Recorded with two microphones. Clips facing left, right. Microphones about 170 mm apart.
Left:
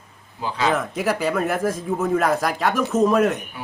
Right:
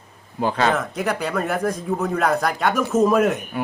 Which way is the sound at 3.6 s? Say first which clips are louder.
Right 9 dB; 55° right (ahead or behind).